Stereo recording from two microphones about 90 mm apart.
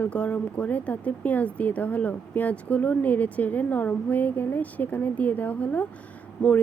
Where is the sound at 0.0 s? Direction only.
15° left (ahead or behind).